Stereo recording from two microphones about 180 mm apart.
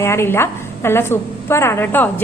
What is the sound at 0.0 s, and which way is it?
A woman's voice, 15° left (ahead or behind).